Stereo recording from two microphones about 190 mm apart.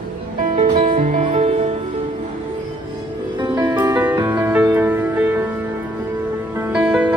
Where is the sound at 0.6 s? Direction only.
40° right (ahead or behind).